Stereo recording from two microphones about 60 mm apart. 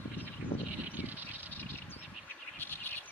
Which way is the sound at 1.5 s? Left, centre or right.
Left.